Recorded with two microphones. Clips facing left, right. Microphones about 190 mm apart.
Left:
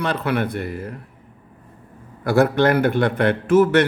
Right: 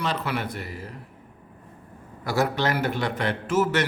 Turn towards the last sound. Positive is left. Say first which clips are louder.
# left 8 dB
turn(degrees=55)  # may be behind; listen again after turning